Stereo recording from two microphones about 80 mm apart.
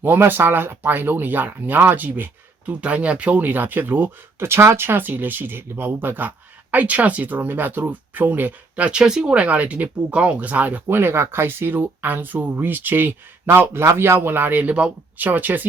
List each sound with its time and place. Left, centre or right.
0.0 s speech: right